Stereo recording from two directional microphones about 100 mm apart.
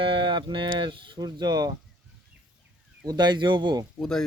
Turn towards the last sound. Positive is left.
turn(degrees=5)  # may be behind; listen again after turning